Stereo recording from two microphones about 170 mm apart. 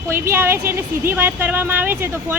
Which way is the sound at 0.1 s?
15° right (ahead or behind).